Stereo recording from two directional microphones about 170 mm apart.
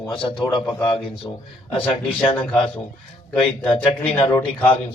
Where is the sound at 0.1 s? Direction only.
30° left (ahead or behind).